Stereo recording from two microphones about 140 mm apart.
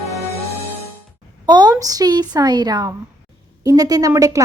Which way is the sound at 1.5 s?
30° right (ahead or behind).